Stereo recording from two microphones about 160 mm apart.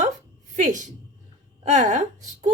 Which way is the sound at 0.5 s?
50° right (ahead or behind).